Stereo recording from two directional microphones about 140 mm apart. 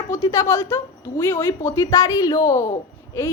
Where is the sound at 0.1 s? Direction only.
25° left (ahead or behind).